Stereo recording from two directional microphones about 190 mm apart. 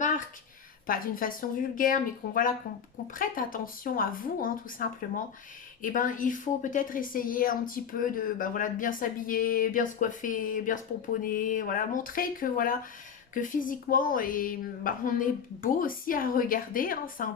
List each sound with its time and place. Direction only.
0.9 s a woman's voice: 45° left (ahead or behind)